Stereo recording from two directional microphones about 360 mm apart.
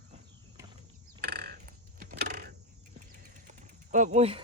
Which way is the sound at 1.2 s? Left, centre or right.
Right.